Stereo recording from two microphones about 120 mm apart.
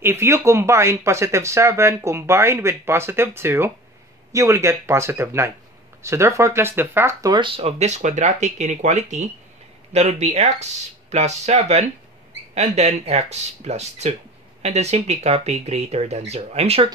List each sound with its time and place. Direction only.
0.0 s speech: 20° right (ahead or behind)
7.3 s speech: 50° right (ahead or behind)